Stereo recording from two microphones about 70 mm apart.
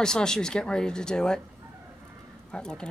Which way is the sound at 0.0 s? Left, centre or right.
Centre.